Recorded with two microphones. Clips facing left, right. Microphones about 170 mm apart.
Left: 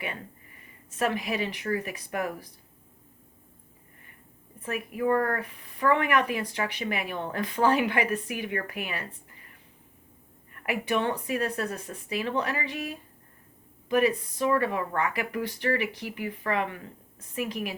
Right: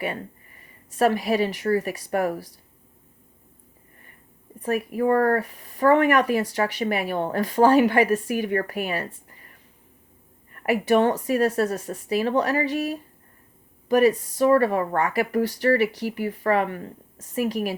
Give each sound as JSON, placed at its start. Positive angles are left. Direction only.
{"t": 0.9, "sound": "speech", "side_deg": -40}
{"t": 4.6, "sound": "speech", "side_deg": -40}
{"t": 10.5, "sound": "speech", "side_deg": -45}